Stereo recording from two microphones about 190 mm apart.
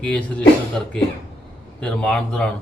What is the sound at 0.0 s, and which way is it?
Speech, 5° left (ahead or behind).